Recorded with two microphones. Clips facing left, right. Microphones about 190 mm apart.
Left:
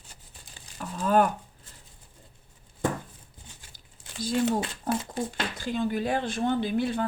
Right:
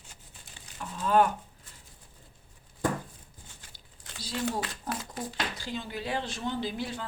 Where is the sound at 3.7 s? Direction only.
50° left (ahead or behind).